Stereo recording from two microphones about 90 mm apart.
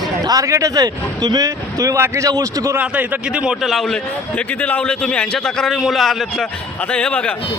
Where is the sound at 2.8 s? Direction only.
15° right (ahead or behind).